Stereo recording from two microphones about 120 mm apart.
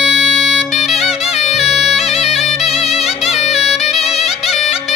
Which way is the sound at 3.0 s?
Centre (ahead or behind).